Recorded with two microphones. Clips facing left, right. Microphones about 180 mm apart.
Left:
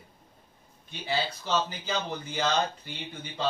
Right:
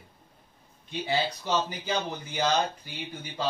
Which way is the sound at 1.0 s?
15° right (ahead or behind).